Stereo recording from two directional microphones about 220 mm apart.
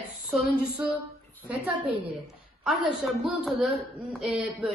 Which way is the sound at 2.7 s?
Centre (ahead or behind).